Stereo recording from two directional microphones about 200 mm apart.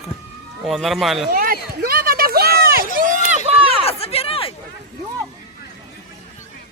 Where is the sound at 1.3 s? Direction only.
45° right (ahead or behind).